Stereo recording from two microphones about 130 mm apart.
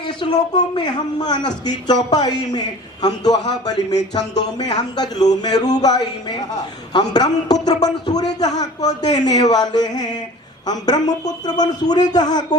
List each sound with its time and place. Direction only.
0.0 s speech: 35° left (ahead or behind)